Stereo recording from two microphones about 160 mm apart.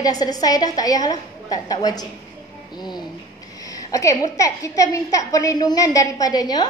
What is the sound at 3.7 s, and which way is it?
A woman's voice, 20° left (ahead or behind).